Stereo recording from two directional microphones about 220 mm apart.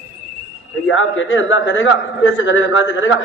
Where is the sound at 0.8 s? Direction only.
65° left (ahead or behind).